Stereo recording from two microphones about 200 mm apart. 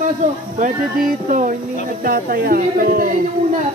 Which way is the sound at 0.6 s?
40° right (ahead or behind).